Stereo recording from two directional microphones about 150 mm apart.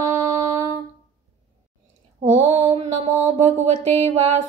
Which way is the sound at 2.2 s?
45° right (ahead or behind).